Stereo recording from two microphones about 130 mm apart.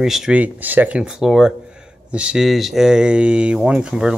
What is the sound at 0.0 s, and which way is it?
Speech, 5° right (ahead or behind).